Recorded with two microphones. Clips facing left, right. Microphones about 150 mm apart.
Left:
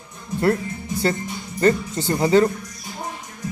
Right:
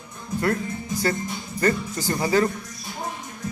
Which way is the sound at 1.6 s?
25° left (ahead or behind).